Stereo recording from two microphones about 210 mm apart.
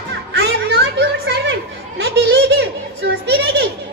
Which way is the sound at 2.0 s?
55° right (ahead or behind).